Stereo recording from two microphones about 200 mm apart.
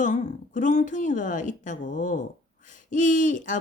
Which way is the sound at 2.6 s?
40° left (ahead or behind).